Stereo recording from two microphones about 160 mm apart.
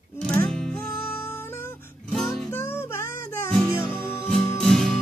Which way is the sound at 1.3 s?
15° left (ahead or behind).